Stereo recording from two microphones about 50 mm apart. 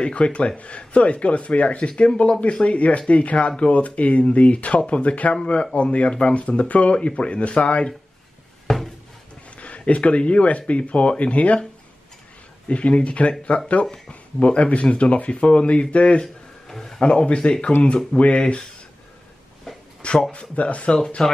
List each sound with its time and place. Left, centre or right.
0.0 s speech: left
8.6 s a sound: centre
9.6 s speech: left
12.6 s speech: left
13.8 s speech: centre
14.4 s speech: left
16.2 s a sound: centre
17.0 s speech: left
20.0 s speech: centre